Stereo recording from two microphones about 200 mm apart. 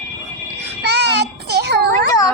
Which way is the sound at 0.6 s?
60° right (ahead or behind).